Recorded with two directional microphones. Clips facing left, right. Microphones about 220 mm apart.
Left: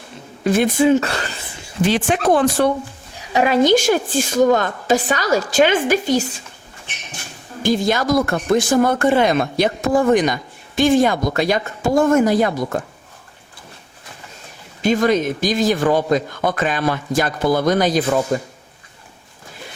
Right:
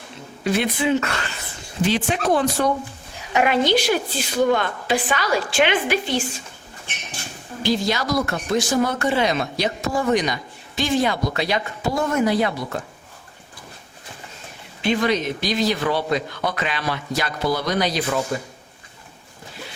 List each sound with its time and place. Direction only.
0.4 s speech: 45° left (ahead or behind)
1.9 s speech: 55° left (ahead or behind)
3.3 s speech: 35° left (ahead or behind)
7.6 s speech: 50° left (ahead or behind)
14.8 s speech: 45° left (ahead or behind)